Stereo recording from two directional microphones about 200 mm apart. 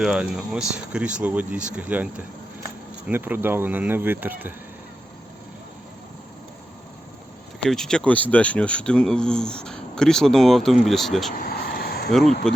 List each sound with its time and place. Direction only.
0.0 s speech: 5° right (ahead or behind)
7.6 s speech: 5° left (ahead or behind)
11.3 s a sound: 45° left (ahead or behind)
12.1 s speech: centre (ahead or behind)